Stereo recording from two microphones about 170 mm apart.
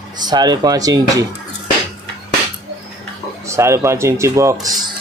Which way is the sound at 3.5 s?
15° right (ahead or behind).